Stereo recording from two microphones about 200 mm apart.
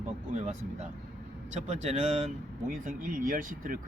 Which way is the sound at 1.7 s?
35° right (ahead or behind).